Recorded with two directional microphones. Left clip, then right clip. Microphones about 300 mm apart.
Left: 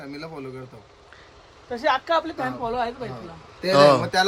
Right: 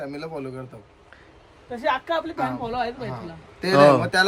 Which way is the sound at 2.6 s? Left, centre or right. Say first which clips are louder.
Left 1 dB; centre.